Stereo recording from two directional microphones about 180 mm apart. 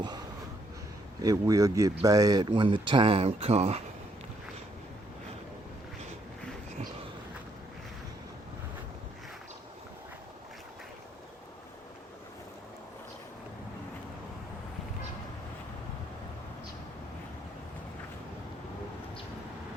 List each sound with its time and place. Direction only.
1.2 s speech: 20° right (ahead or behind); by 3.8 s 35° right (ahead or behind)